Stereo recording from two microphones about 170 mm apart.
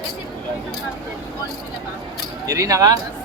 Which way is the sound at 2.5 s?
20° right (ahead or behind).